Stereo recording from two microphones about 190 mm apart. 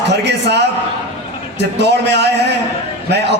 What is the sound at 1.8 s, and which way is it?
Speech, 65° right (ahead or behind).